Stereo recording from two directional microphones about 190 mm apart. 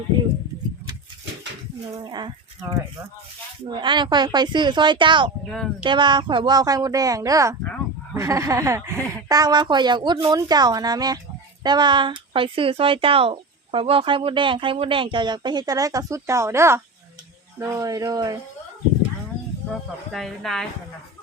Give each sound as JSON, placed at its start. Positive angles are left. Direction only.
{"t": 2.0, "sound": "a woman's voice", "side_deg": -20}
{"t": 5.5, "sound": "speech", "side_deg": 0}
{"t": 5.8, "sound": "a woman's voice", "side_deg": -25}
{"t": 20.1, "sound": "speech", "side_deg": 0}